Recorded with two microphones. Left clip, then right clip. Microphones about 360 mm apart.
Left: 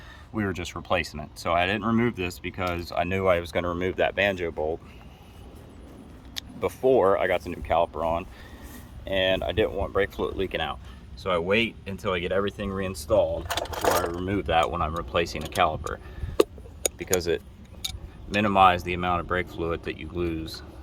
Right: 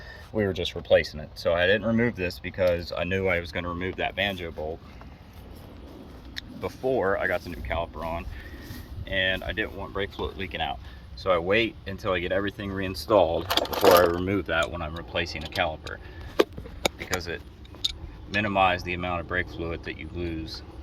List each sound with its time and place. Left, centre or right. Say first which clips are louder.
0.9 s speech: right 6 dB; centre
6.3 s speech: left 5 dB; centre
13.6 s speech: right 7 dB; right
14.2 s speech: left 2 dB; centre
17.1 s speech: left 6 dB; centre
20.4 s speech: left 1 dB; left